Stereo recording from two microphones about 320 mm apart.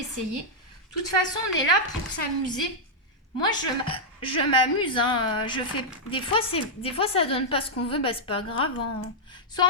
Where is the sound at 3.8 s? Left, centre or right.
Centre.